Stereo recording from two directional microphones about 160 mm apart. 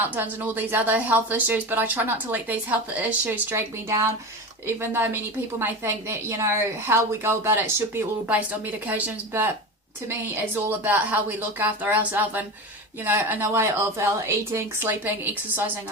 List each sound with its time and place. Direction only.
0.0 s speech: 10° right (ahead or behind)
8.9 s speech: 10° right (ahead or behind)